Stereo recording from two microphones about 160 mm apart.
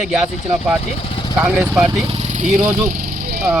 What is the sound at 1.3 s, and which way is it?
Speech, 10° right (ahead or behind).